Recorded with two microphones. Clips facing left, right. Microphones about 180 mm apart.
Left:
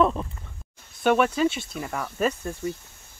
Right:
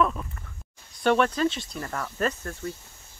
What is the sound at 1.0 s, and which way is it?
Speech, 10° left (ahead or behind).